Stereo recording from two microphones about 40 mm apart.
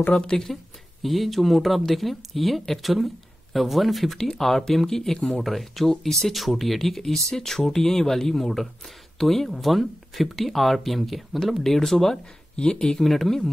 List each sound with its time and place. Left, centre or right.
0.1 s speech: left
0.5 s speech: centre
12.5 s speech: left
13.0 s speech: centre